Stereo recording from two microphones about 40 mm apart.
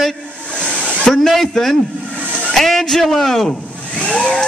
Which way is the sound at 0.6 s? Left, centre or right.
Left.